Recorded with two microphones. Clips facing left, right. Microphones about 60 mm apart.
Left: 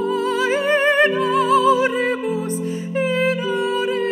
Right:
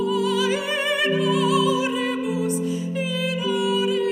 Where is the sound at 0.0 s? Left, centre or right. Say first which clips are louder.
Left 2 dB; left.